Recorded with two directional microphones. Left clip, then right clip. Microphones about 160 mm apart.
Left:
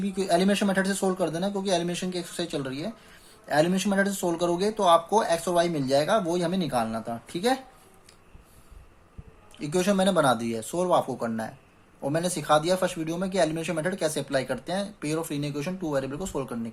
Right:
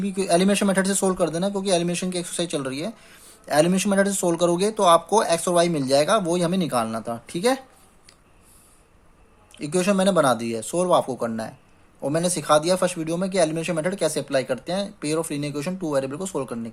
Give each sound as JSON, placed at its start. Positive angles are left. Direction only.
{"t": 0.0, "sound": "speech", "side_deg": -35}
{"t": 9.5, "sound": "speech", "side_deg": -30}